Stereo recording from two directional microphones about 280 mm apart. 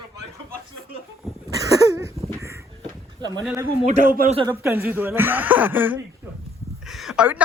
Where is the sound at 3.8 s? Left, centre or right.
Right.